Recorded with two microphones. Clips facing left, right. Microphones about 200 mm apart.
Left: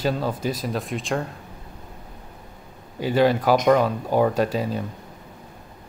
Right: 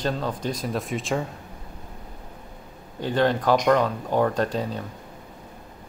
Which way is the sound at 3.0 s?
10° left (ahead or behind).